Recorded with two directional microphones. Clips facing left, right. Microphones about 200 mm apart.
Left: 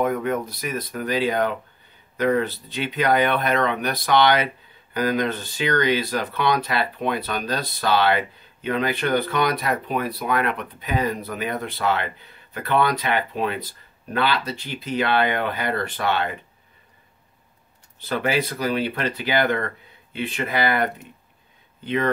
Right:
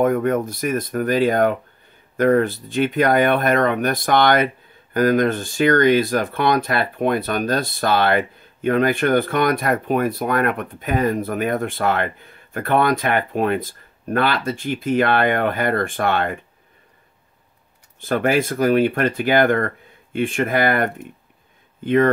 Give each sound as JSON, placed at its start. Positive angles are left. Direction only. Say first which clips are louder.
{"t": 0.0, "sound": "speech", "louder": "right 5 dB", "side_deg": -45}
{"t": 18.0, "sound": "speech", "louder": "right 5 dB", "side_deg": -50}